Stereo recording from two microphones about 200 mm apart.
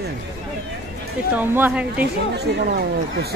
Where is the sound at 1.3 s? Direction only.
10° right (ahead or behind).